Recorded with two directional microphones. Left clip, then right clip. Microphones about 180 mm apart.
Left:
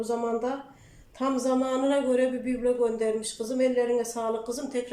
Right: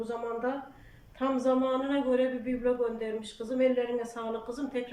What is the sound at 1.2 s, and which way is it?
A man's voice, 30° left (ahead or behind).